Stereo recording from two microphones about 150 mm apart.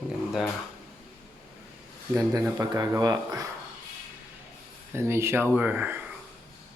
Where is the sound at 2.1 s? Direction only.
20° right (ahead or behind).